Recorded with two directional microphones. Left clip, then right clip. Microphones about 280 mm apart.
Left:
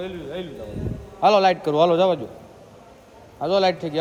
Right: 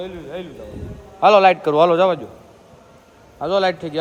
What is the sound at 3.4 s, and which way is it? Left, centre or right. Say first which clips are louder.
Speech: right 1 dB; centre.